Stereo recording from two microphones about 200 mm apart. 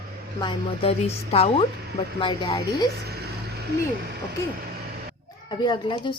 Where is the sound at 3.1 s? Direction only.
55° right (ahead or behind).